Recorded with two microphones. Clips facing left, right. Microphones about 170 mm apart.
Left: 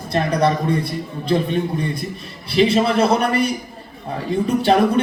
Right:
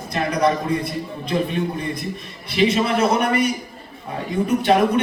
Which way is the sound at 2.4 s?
30° left (ahead or behind).